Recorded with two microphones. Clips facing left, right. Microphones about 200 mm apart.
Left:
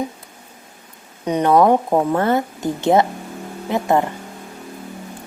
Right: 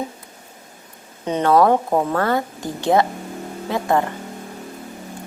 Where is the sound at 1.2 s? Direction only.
15° left (ahead or behind).